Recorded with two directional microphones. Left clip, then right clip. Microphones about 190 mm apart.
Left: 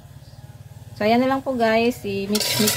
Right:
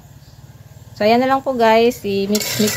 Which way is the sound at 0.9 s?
20° right (ahead or behind).